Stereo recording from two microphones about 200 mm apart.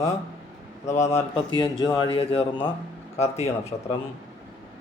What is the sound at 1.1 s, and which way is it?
Speech, 30° left (ahead or behind).